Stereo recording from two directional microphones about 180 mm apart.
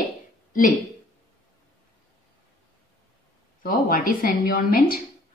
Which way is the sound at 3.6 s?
50° left (ahead or behind).